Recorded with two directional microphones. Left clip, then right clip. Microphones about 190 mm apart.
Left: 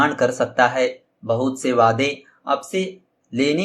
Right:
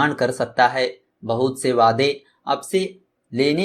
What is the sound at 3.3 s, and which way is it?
Speech, 25° right (ahead or behind).